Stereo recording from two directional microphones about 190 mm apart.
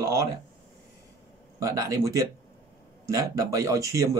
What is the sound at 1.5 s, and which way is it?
A man's voice, 15° right (ahead or behind).